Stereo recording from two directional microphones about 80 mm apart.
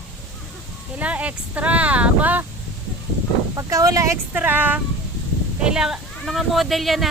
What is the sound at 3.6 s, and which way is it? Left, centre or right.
Speech, right.